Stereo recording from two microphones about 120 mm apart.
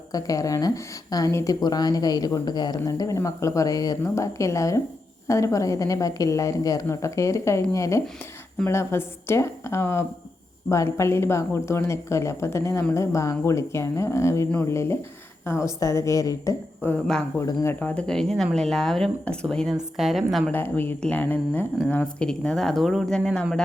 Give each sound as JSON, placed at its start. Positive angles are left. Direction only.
{"t": 0.1, "sound": "speech", "side_deg": 30}
{"t": 16.8, "sound": "speech", "side_deg": 10}
{"t": 17.4, "sound": "speech", "side_deg": 25}
{"t": 17.7, "sound": "speech", "side_deg": 10}
{"t": 20.5, "sound": "speech", "side_deg": 15}